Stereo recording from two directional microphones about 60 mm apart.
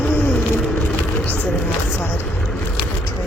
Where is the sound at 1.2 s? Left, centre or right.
Left.